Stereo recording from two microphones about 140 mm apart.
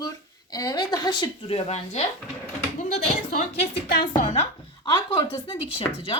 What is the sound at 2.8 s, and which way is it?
Speech, 90° left.